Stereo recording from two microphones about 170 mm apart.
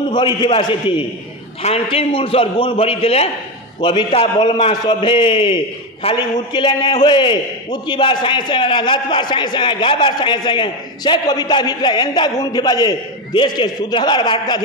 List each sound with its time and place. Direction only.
0.1 s a man's voice: 25° left (ahead or behind)